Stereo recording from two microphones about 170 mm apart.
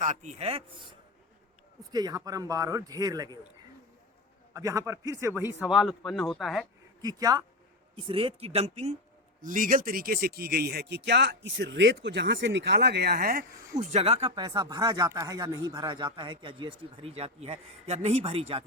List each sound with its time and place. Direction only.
0.0 s speech: 45° right (ahead or behind)
1.9 s speech: 25° right (ahead or behind)
4.5 s speech: 20° right (ahead or behind)
5.6 s speech: centre (ahead or behind)
7.0 s speech: 20° right (ahead or behind); by 9.0 s 40° right (ahead or behind)
9.4 s speech: 50° right (ahead or behind)
13.8 s speech: 40° right (ahead or behind)